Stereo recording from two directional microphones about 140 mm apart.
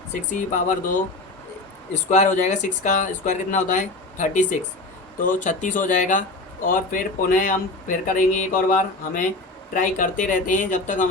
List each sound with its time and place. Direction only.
0.1 s speech: 65° left (ahead or behind)
1.9 s speech: 55° left (ahead or behind)